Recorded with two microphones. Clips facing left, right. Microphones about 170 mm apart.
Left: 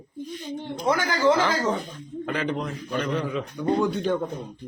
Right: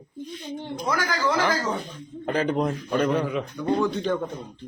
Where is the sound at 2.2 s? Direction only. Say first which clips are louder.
Right 5 dB; 40° right (ahead or behind).